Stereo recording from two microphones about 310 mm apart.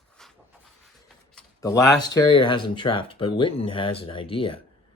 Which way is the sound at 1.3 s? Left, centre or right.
Centre.